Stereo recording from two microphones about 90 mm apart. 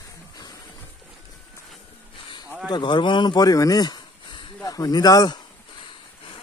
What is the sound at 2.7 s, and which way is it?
Speech, 60° left (ahead or behind).